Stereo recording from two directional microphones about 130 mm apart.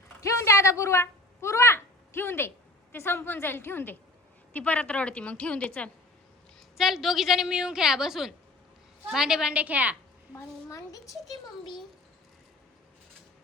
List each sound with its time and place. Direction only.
0.2 s a sound: 25° left (ahead or behind)
2.9 s a woman's voice: 15° left (ahead or behind)
6.7 s a woman's voice: centre (ahead or behind)
10.3 s a woman's voice: 25° left (ahead or behind)